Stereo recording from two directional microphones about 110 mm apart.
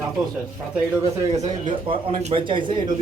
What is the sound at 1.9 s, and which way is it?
Speech, 55° right (ahead or behind).